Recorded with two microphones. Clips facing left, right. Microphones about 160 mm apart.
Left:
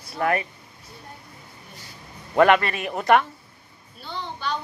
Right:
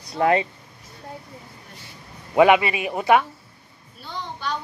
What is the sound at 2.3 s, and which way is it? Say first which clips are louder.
A man's voice: right 2 dB; 10° right (ahead or behind).